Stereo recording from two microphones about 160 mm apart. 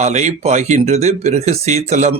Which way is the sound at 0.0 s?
45° right (ahead or behind).